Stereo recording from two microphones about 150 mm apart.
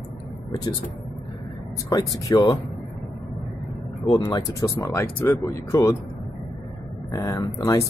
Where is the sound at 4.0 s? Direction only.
30° left (ahead or behind).